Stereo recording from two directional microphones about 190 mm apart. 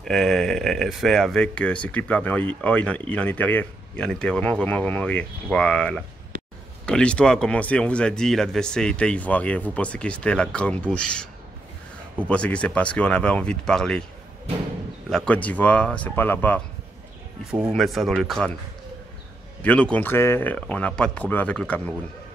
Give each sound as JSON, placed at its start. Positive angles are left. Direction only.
{"t": 0.0, "sound": "speech", "side_deg": 0}
{"t": 12.3, "sound": "speech", "side_deg": 5}
{"t": 15.0, "sound": "speech", "side_deg": 5}
{"t": 17.5, "sound": "speech", "side_deg": -5}
{"t": 19.6, "sound": "speech", "side_deg": 5}